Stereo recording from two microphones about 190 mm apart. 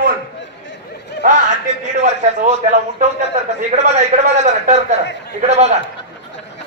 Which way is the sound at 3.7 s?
35° right (ahead or behind).